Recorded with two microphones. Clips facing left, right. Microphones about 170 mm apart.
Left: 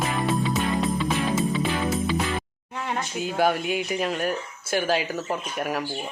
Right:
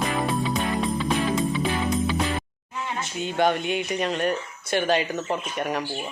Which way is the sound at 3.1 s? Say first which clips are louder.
Right 1 dB; 5° left (ahead or behind).